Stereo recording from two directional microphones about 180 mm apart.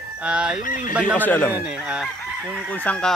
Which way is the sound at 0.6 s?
50° left (ahead or behind).